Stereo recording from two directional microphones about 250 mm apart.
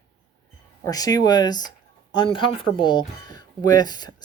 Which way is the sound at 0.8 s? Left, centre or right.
Centre.